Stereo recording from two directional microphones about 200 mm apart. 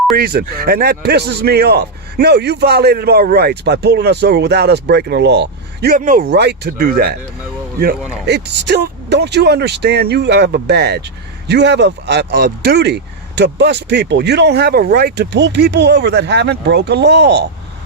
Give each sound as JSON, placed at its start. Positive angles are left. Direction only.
{"t": 0.2, "sound": "a man's voice", "side_deg": -50}
{"t": 6.3, "sound": "a man's voice", "side_deg": -55}
{"t": 8.3, "sound": "speech", "side_deg": -55}